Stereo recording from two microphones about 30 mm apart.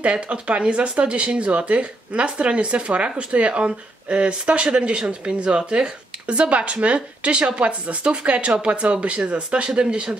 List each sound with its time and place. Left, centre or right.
0.0 s speech: right